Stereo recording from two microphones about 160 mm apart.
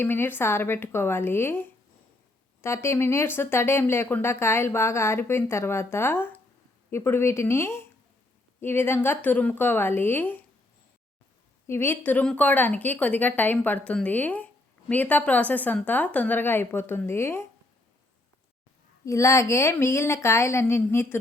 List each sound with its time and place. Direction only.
0.0 s a woman's voice: 15° left (ahead or behind)
11.7 s a woman's voice: 15° left (ahead or behind)
19.0 s a woman's voice: 20° left (ahead or behind)